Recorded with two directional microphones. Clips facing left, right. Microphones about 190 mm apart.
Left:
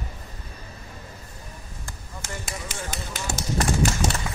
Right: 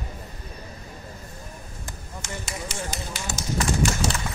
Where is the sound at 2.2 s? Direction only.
50° left (ahead or behind).